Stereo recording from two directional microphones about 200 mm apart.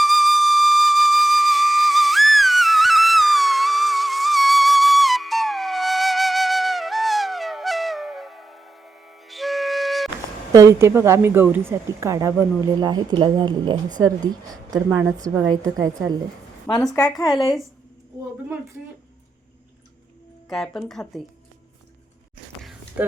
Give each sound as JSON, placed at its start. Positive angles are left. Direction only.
{"t": 0.0, "sound": "flute", "side_deg": 0}
{"t": 10.5, "sound": "a woman's voice", "side_deg": -15}
{"t": 16.6, "sound": "a woman's voice", "side_deg": 20}
{"t": 20.5, "sound": "speech", "side_deg": 0}